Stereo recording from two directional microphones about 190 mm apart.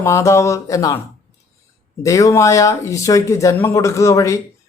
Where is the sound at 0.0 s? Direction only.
15° left (ahead or behind).